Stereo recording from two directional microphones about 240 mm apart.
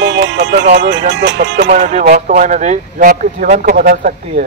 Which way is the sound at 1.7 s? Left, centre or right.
Right.